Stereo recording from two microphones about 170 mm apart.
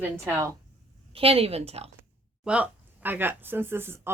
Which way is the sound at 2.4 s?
5° right (ahead or behind).